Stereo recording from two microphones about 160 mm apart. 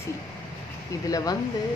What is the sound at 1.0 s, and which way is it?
Speech, 20° left (ahead or behind).